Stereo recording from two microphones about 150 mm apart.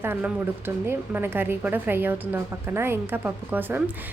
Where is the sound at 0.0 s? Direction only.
15° right (ahead or behind).